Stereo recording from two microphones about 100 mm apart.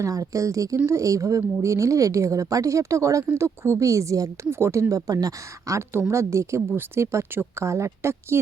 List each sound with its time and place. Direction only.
0.0 s a woman's voice: 35° right (ahead or behind)